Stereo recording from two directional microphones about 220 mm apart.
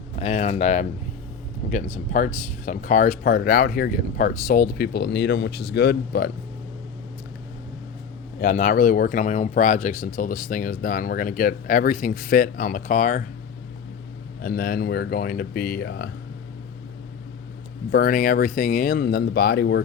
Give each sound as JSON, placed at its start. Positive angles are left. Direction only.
{"t": 0.2, "sound": "a sound", "side_deg": 30}
{"t": 1.7, "sound": "speech", "side_deg": 35}
{"t": 8.4, "sound": "speech", "side_deg": 35}
{"t": 14.4, "sound": "speech", "side_deg": 40}
{"t": 17.9, "sound": "speech", "side_deg": 40}